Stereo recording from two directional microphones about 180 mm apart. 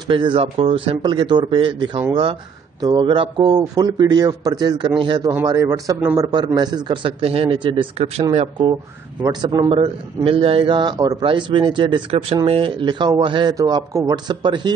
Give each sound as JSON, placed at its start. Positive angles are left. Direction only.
{"t": 0.1, "sound": "a man's voice", "side_deg": -30}
{"t": 5.3, "sound": "a man's voice", "side_deg": -15}